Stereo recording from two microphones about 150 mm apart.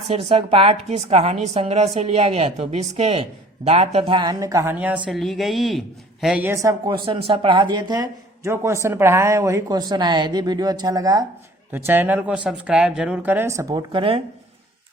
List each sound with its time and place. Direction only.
0.1 s a woman's voice: 40° right (ahead or behind); by 6.5 s 5° right (ahead or behind)
6.5 s speech: 20° right (ahead or behind)
6.9 s a woman's voice: 30° right (ahead or behind)
11.7 s a woman's voice: 15° right (ahead or behind)
13.9 s a woman's voice: 35° right (ahead or behind)